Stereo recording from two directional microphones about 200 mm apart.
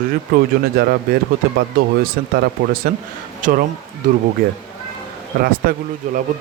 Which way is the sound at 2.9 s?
50° right (ahead or behind).